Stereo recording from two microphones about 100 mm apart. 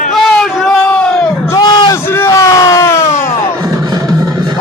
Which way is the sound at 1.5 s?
45° left (ahead or behind).